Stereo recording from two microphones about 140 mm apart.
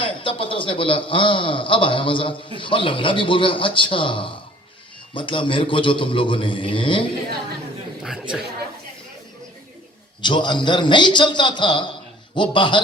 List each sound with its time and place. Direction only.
0.0 s a man's voice: 40° left (ahead or behind)
8.0 s chatter: 5° right (ahead or behind)
10.2 s a man's voice: 35° left (ahead or behind)